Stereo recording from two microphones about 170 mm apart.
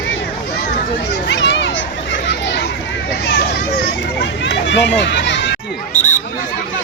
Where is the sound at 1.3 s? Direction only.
90° left.